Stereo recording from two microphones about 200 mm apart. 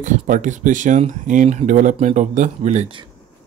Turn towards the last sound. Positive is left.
turn(degrees=-30)  # may be behind; listen again after turning